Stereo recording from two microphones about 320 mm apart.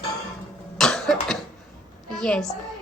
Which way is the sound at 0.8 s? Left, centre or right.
Centre.